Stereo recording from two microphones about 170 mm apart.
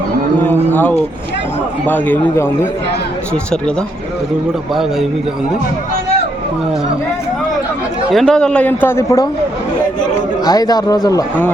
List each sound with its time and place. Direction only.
0.4 s a man's voice: 10° left (ahead or behind)
4.7 s a man's voice: centre (ahead or behind)
8.1 s a man's voice: 5° left (ahead or behind)
10.4 s speech: 20° left (ahead or behind)